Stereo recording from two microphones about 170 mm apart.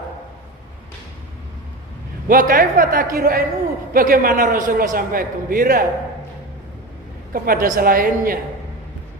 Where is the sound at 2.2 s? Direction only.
55° right (ahead or behind).